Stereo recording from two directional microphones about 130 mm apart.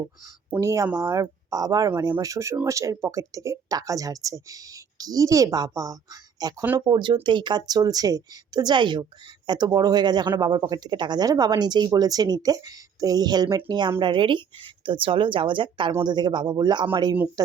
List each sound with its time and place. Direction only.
0.6 s speech: 25° right (ahead or behind)